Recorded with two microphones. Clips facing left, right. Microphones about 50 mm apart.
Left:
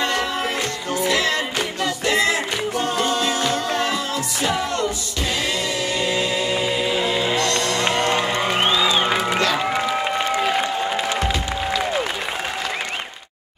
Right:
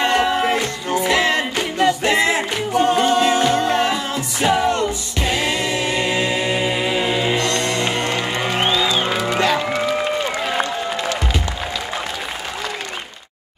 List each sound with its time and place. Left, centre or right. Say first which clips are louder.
0.0 s music: right 5 dB; right
8.9 s music: even; centre